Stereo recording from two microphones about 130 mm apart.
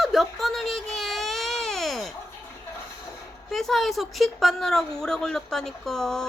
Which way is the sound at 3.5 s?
Centre (ahead or behind).